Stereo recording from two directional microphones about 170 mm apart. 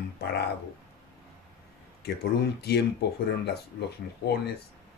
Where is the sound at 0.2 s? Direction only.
70° left (ahead or behind).